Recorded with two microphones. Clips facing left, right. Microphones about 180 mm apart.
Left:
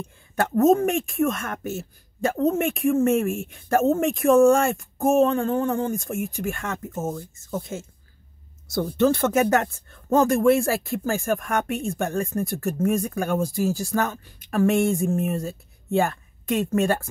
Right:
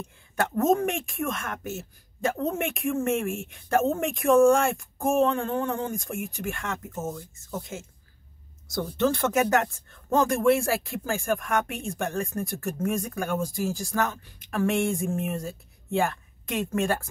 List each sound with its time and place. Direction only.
0.6 s speech: 40° left (ahead or behind)
9.0 s speech: 40° left (ahead or behind)